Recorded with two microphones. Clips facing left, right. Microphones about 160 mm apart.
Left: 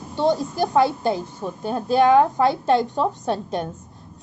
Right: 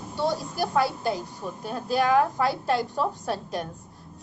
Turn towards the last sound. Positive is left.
turn(degrees=25)  # may be behind; listen again after turning